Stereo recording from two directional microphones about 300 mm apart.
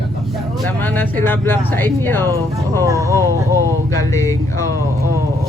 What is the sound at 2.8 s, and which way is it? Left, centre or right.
Speech, centre.